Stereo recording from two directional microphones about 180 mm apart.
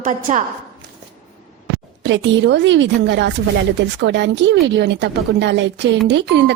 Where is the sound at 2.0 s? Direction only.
80° right.